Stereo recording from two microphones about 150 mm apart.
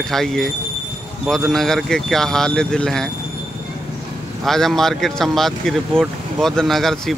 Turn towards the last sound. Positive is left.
turn(degrees=0)  # may be behind; listen again after turning